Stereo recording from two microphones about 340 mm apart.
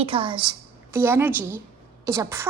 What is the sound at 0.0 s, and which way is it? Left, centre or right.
A woman's voice, centre.